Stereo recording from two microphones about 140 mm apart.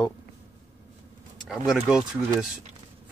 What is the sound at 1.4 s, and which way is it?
Speech, 5° right (ahead or behind).